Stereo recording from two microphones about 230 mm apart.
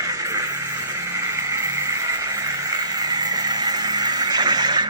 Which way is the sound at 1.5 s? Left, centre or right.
Centre.